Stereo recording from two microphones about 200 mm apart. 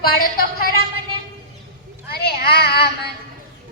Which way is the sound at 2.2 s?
50° left (ahead or behind).